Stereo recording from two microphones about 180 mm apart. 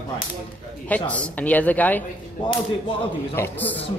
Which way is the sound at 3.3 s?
10° left (ahead or behind).